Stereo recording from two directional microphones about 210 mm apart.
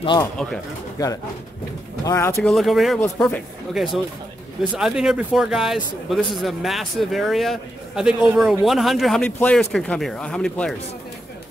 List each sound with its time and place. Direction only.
0.0 s speech: 20° left (ahead or behind)
2.5 s a man's voice: centre (ahead or behind)